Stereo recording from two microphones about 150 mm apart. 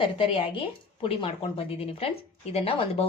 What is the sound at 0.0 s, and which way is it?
Speech, 35° left (ahead or behind).